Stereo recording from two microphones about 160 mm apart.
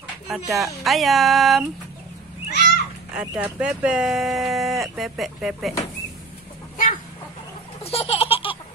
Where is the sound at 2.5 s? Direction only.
90° left.